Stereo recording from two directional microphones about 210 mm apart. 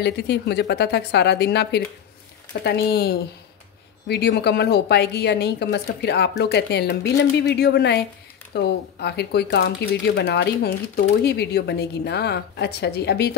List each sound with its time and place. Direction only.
0.0 s a woman's voice: 55° left (ahead or behind)